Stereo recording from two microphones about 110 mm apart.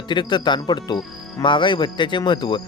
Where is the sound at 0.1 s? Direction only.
45° left (ahead or behind).